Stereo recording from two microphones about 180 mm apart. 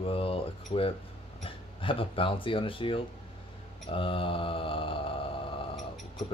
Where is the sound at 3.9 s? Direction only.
30° left (ahead or behind).